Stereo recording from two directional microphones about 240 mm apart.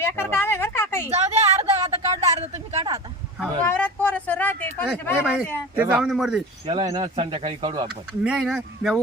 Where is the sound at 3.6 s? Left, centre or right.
Centre.